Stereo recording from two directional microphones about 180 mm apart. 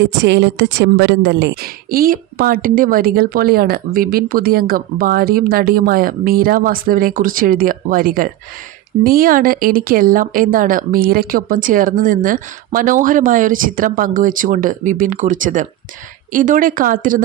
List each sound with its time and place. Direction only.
0.0 s speech: 80° right; by 17.2 s 50° right (ahead or behind)